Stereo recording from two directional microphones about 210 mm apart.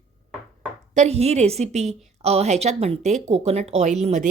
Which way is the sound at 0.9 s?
30° right (ahead or behind).